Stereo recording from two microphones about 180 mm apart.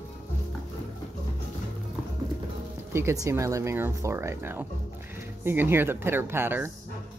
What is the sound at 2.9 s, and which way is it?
Speech, 15° right (ahead or behind).